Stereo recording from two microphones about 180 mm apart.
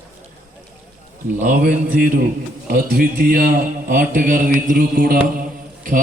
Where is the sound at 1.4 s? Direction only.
45° right (ahead or behind).